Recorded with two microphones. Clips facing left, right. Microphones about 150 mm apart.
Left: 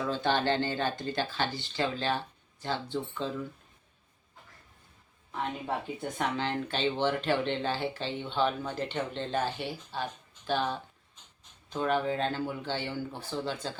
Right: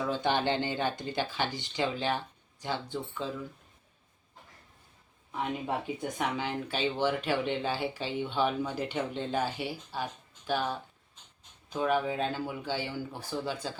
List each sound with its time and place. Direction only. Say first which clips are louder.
0.0 s speech: even; 15° right (ahead or behind)
5.3 s speech: right 1 dB; 10° right (ahead or behind)